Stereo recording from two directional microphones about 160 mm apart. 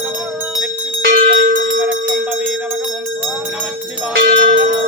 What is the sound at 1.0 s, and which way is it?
Bell, 70° right (ahead or behind).